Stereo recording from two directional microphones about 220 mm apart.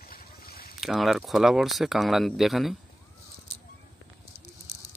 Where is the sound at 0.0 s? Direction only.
45° left (ahead or behind).